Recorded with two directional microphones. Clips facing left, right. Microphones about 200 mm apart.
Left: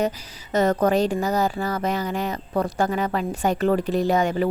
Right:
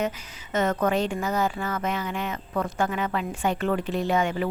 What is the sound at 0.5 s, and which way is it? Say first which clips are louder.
A woman's voice: left 4 dB; 35° left (ahead or behind).